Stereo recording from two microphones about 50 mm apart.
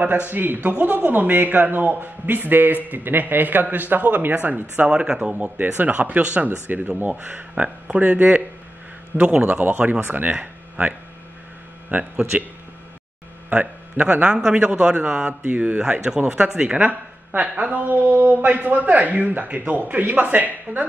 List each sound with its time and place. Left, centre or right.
0.0 s a man's voice: right
0.6 s a man's voice: right
4.8 s speech: centre
5.2 s a man's voice: right
10.0 s a man's voice: right
10.4 s a sound: right
11.9 s speech: centre
13.5 s a man's voice: right
15.2 s a man's voice: right
15.8 s a man's voice: centre; by 20.8 s right